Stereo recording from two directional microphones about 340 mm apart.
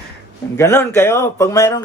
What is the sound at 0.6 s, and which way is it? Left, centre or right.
Speech, centre.